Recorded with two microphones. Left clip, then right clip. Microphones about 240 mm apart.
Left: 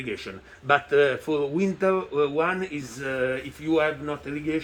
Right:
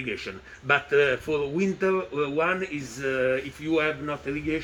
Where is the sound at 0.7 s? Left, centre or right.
Centre.